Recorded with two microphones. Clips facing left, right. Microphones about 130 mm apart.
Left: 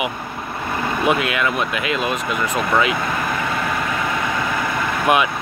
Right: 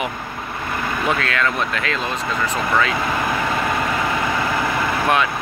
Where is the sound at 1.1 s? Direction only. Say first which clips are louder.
Left 2 dB; 15° left (ahead or behind).